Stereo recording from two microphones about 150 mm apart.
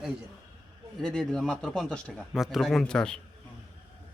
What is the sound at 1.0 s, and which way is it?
Speech, 5° left (ahead or behind).